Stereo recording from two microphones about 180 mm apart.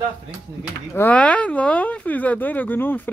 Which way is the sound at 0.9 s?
10° left (ahead or behind).